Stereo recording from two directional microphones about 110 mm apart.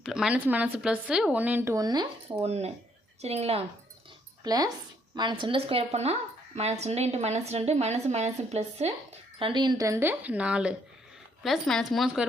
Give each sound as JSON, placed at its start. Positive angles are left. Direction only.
{"t": 0.0, "sound": "speech", "side_deg": -5}
{"t": 1.6, "sound": "speech", "side_deg": -30}
{"t": 2.4, "sound": "a woman's voice", "side_deg": -75}
{"t": 4.4, "sound": "speech", "side_deg": -35}
{"t": 9.4, "sound": "speech", "side_deg": -45}
{"t": 11.4, "sound": "speech", "side_deg": 0}